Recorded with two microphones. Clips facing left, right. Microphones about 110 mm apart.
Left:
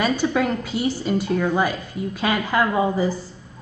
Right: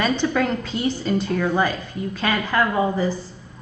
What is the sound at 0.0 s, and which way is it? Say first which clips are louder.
Speech: even; 10° left (ahead or behind).